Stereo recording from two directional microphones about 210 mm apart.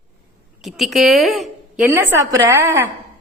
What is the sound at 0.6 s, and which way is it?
A woman's voice, centre (ahead or behind).